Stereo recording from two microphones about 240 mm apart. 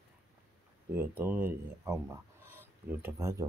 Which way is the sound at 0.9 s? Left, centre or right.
Centre.